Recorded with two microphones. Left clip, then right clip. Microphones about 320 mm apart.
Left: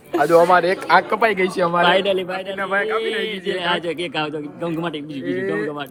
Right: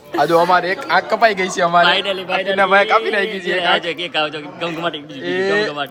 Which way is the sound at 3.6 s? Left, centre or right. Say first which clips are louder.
Right 6 dB; left.